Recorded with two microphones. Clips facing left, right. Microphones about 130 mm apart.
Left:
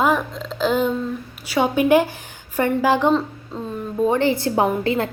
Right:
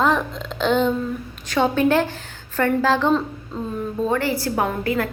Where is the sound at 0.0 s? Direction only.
5° left (ahead or behind).